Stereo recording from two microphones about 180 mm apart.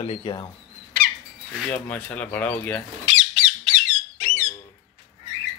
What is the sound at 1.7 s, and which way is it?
Speech, 10° left (ahead or behind).